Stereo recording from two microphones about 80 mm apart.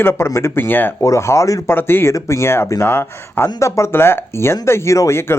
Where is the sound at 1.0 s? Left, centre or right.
Left.